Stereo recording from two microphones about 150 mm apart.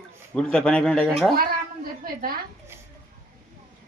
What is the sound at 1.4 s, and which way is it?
Cat, 75° right (ahead or behind).